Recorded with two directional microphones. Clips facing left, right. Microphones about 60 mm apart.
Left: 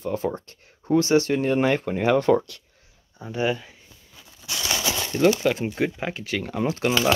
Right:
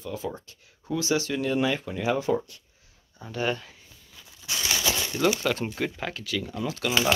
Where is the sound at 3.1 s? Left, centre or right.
Centre.